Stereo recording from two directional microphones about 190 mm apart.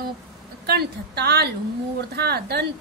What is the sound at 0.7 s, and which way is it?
A woman's voice, 60° right (ahead or behind).